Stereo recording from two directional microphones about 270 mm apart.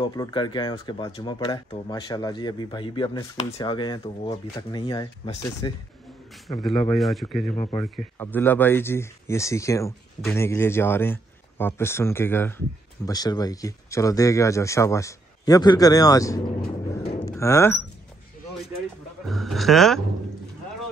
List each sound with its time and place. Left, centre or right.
0.0 s a man's voice: centre
6.6 s a man's voice: centre
19.2 s speech: centre